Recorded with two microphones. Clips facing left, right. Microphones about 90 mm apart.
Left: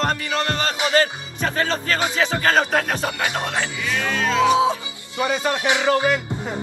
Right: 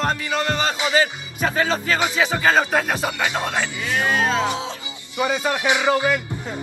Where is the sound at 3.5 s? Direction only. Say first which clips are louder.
Right 1 dB; 20° right (ahead or behind).